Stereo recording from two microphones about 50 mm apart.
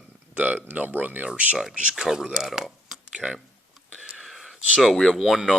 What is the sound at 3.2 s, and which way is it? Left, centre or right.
Speech, right.